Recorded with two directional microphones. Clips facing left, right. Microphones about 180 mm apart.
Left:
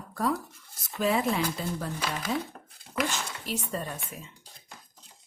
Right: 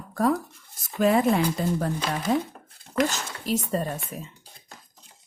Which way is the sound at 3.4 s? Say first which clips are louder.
Right 9 dB; 40° right (ahead or behind).